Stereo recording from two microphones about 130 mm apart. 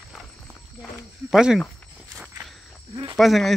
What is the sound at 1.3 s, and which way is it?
Speech, 5° right (ahead or behind).